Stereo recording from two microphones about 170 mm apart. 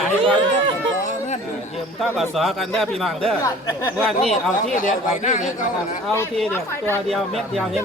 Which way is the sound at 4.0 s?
Centre (ahead or behind).